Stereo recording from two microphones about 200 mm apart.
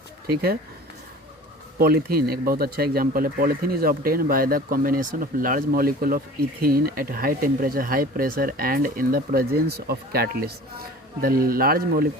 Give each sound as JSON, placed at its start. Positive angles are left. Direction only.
{"t": 1.8, "sound": "speech", "side_deg": -50}